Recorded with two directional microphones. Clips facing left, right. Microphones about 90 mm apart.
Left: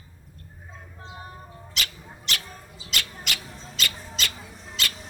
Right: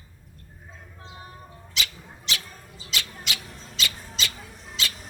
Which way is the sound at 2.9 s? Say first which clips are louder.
Left 1 dB; 50° left (ahead or behind).